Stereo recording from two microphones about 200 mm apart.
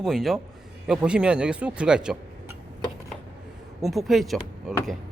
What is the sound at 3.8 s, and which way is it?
Speech, centre (ahead or behind).